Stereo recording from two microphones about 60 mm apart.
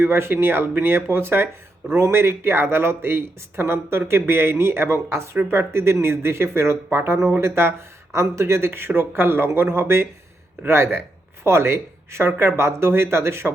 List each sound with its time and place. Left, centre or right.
0.0 s speech: right